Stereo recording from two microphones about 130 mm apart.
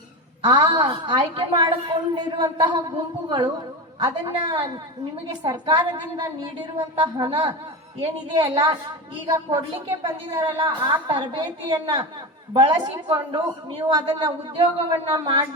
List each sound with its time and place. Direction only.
0.4 s a woman's voice: 35° right (ahead or behind)
9.2 s a woman's voice: 30° right (ahead or behind)